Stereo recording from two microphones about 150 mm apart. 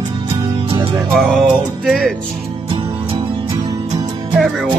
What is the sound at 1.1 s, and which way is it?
Speech, centre (ahead or behind).